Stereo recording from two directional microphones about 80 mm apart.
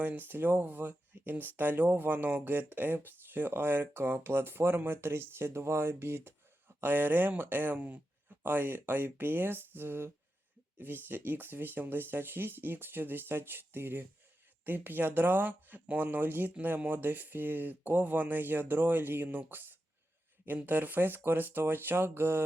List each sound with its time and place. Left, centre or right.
0.0 s speech: right